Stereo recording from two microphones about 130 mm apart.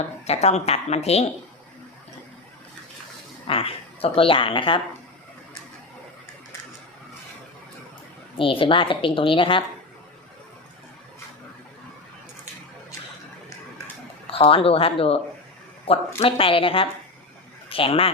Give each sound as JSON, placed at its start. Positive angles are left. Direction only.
{"t": 0.3, "sound": "speech", "side_deg": 55}
{"t": 3.4, "sound": "speech", "side_deg": 45}
{"t": 8.4, "sound": "a woman's voice", "side_deg": 40}
{"t": 14.3, "sound": "speech", "side_deg": 45}